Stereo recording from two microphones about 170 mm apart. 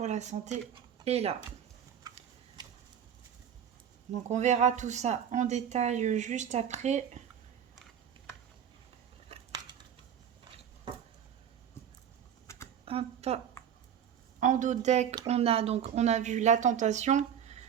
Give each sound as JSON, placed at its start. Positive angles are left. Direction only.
{"t": 0.0, "sound": "speech", "side_deg": -40}
{"t": 4.1, "sound": "speech", "side_deg": -45}
{"t": 12.8, "sound": "a sound", "side_deg": -35}
{"t": 14.4, "sound": "speech", "side_deg": -50}